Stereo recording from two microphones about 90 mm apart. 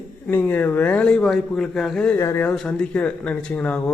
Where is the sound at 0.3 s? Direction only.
20° left (ahead or behind); by 2.0 s 5° left (ahead or behind).